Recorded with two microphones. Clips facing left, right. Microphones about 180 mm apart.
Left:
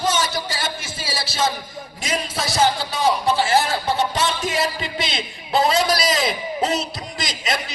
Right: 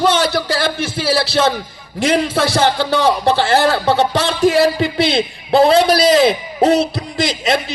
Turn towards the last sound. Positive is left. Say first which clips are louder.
# right 9 dB
turn(degrees=-30)  # may be behind; listen again after turning